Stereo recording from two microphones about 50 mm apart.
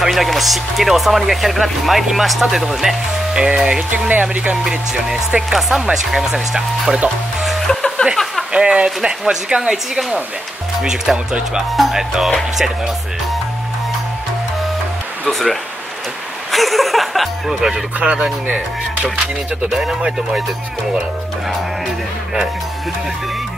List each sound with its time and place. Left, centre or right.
0.0 s speech: centre
3.3 s speech: centre
5.6 s speech: centre
7.4 s music: centre
8.5 s speech: centre
10.8 s speech: centre
15.2 s speech: centre
16.5 s speech: centre
17.9 s speech: right
19.7 s speech: centre